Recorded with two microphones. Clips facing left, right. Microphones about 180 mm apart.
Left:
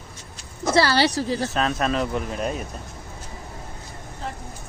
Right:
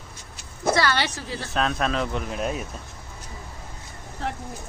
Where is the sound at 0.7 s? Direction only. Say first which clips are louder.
Left 4 dB; 30° left (ahead or behind).